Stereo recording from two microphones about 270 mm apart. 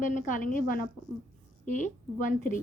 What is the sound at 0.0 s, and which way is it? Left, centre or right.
A woman's voice, left.